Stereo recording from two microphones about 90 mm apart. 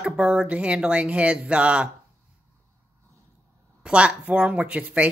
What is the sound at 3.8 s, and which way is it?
Speech, 10° right (ahead or behind).